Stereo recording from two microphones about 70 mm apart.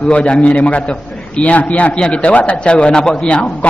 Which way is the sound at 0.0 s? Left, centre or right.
Centre.